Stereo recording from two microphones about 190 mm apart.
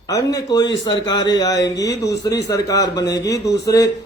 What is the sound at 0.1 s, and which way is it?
A man's voice, 20° left (ahead or behind).